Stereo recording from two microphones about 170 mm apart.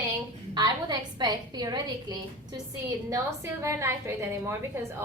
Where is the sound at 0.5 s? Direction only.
25° right (ahead or behind).